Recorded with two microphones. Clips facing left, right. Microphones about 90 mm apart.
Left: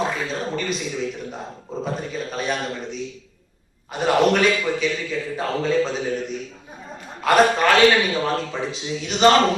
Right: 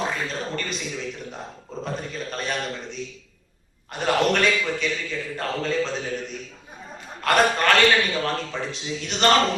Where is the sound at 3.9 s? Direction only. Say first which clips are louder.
Left 4 dB; 5° left (ahead or behind).